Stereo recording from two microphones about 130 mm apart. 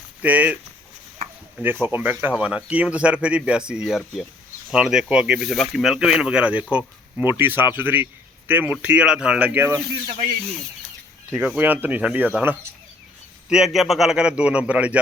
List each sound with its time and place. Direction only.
0.2 s speech: 10° right (ahead or behind)
1.6 s speech: 15° right (ahead or behind)
11.3 s speech: 10° right (ahead or behind)
13.5 s speech: centre (ahead or behind)